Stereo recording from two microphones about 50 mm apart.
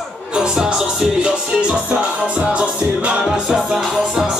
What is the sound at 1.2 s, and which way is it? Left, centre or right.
Music, centre.